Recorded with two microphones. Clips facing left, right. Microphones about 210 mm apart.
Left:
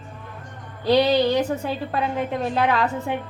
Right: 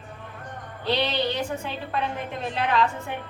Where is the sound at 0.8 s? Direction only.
40° left (ahead or behind).